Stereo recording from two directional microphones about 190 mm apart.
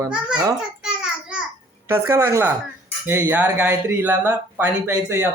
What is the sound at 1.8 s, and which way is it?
Speech, 15° right (ahead or behind).